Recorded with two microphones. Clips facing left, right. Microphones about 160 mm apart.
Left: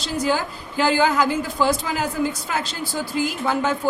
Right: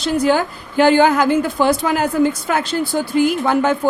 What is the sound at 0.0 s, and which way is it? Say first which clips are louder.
A woman's voice: right 7 dB; 60° right (ahead or behind).